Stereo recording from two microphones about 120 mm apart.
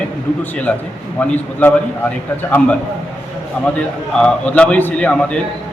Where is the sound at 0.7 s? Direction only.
15° left (ahead or behind).